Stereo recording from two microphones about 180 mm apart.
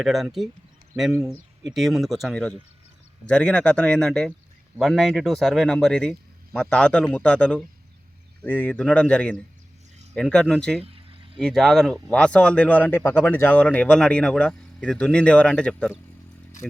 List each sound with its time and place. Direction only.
0.0 s speech: centre (ahead or behind)
1.6 s a man's voice: centre (ahead or behind)
10.8 s speech: 35° right (ahead or behind)
11.3 s speech: centre (ahead or behind)